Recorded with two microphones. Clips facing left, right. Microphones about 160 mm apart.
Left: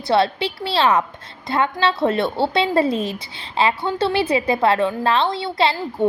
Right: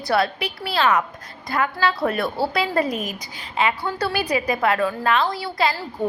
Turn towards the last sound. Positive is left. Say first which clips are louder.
# left 3 dB
turn(degrees=25)  # may be behind; listen again after turning